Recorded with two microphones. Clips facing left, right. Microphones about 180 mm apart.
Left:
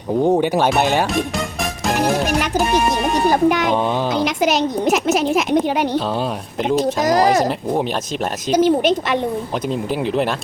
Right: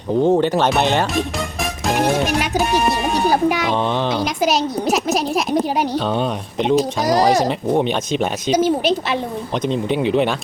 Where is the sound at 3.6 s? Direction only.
10° left (ahead or behind).